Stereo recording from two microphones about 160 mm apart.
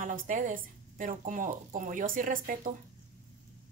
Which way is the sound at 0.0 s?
55° right (ahead or behind).